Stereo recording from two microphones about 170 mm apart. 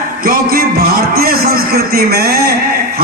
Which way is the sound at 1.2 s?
60° right (ahead or behind).